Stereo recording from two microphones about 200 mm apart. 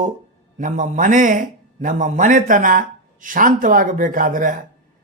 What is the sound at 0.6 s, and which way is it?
A man's voice, 40° right (ahead or behind).